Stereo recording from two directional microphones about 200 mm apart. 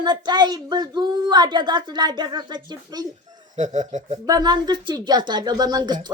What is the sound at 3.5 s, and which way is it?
Speech, 35° right (ahead or behind).